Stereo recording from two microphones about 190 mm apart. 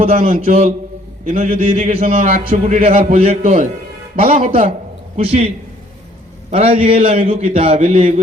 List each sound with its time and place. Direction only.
0.0 s a man's voice: 35° right (ahead or behind)
6.5 s a man's voice: 35° right (ahead or behind)